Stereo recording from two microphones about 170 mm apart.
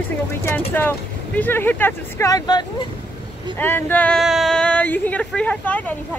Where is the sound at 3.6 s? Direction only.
10° left (ahead or behind).